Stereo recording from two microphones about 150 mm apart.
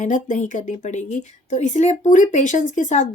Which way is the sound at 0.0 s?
55° left (ahead or behind).